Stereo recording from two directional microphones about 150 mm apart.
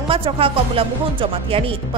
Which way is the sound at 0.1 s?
35° right (ahead or behind).